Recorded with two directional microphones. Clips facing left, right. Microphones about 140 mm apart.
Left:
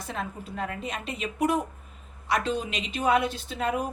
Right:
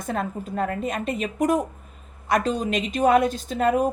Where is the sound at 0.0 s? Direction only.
45° right (ahead or behind).